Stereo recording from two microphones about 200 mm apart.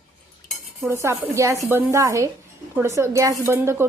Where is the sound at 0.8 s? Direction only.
15° right (ahead or behind).